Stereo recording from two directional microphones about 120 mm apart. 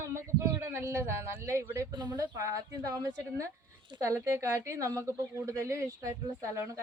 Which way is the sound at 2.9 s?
25° right (ahead or behind).